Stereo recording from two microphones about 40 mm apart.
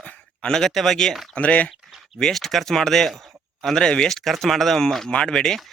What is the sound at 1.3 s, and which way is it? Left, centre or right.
Speech, left.